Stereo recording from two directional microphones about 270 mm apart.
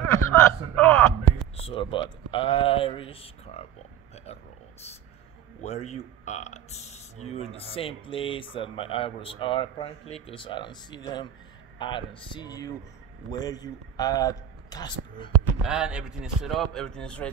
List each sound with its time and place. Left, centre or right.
0.1 s a sound: centre
1.6 s speech: centre
5.6 s a man's voice: left
15.6 s speech: centre